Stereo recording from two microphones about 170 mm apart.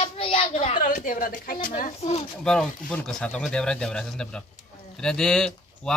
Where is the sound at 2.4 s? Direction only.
5° left (ahead or behind).